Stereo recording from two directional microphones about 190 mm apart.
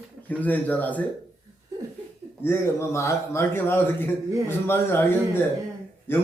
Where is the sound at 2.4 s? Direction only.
15° left (ahead or behind).